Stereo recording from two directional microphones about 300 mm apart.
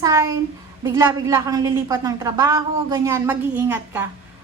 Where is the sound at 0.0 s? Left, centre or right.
Centre.